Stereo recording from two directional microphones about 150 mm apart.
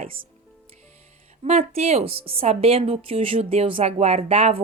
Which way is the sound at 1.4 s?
45° right (ahead or behind).